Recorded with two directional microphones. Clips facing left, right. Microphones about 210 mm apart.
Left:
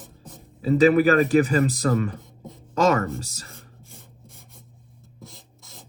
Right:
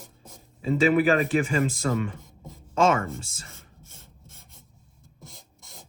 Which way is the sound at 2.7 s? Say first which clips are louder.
Left 2 dB; 40° left (ahead or behind).